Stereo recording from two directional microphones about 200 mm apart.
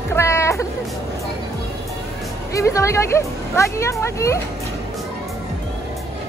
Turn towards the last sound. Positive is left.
turn(degrees=15)  # may be behind; listen again after turning